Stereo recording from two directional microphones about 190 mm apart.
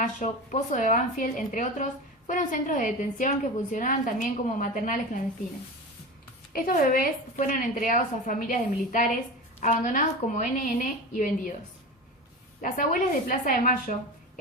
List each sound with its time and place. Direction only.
0.0 s a woman's voice: 40° left (ahead or behind)
6.5 s a woman's voice: 50° left (ahead or behind)
12.6 s a woman's voice: 45° left (ahead or behind)